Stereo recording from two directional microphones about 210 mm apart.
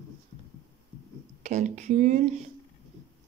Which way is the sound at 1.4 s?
35° right (ahead or behind).